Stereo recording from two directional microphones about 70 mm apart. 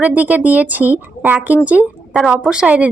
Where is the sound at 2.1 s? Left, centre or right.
Centre.